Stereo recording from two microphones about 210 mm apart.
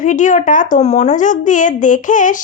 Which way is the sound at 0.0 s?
35° left (ahead or behind).